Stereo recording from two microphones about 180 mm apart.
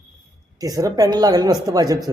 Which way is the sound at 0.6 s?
20° right (ahead or behind).